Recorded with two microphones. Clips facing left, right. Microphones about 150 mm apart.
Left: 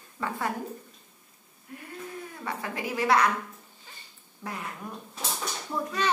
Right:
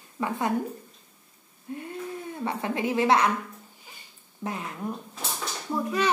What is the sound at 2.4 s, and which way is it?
Speech, 25° right (ahead or behind).